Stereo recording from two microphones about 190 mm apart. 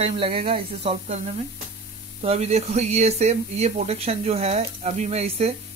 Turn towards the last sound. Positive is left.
turn(degrees=-35)  # may be behind; listen again after turning